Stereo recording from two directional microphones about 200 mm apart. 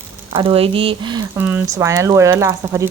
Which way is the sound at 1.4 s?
10° right (ahead or behind).